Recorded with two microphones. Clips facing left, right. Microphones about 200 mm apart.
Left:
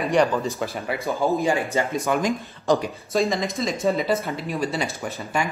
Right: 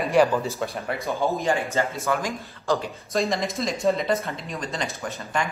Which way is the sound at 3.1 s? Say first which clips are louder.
Left 2 dB; centre (ahead or behind).